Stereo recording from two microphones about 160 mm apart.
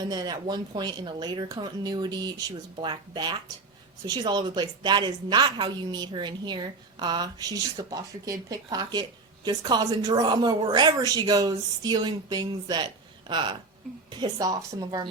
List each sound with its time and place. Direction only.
0.0 s a woman's voice: 25° right (ahead or behind)